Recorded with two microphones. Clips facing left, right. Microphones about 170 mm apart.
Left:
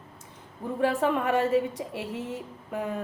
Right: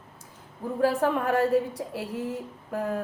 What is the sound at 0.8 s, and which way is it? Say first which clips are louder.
A woman's voice: right 1 dB; centre (ahead or behind).